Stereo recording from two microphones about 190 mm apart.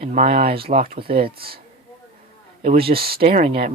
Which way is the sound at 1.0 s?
55° right (ahead or behind).